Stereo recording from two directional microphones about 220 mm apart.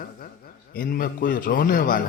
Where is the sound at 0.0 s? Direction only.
40° left (ahead or behind).